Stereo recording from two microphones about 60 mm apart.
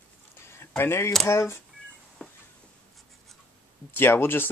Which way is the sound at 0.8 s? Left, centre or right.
Left.